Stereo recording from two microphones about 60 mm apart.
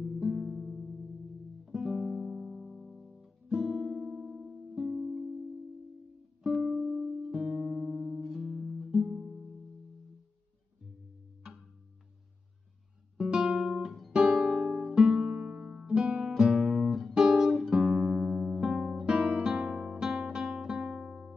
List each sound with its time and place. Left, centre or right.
0.0 s music: centre
3.4 s guitar: centre
4.7 s music: centre
6.4 s music: centre
13.2 s guitar: centre
13.7 s music: centre